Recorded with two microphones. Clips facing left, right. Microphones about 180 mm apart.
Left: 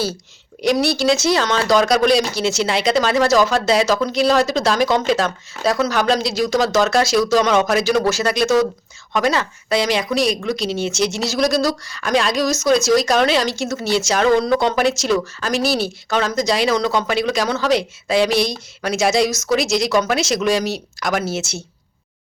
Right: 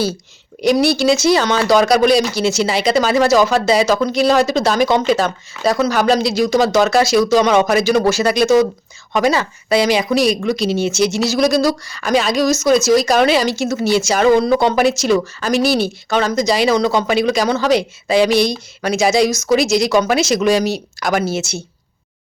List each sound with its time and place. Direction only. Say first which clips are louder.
0.6 s speech: right 3 dB; centre (ahead or behind)